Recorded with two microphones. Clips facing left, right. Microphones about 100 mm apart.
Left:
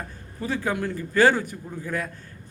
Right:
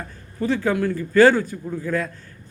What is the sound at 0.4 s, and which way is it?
A man's voice, 15° left (ahead or behind).